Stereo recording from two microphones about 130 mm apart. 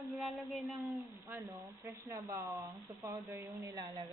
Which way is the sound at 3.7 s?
30° right (ahead or behind).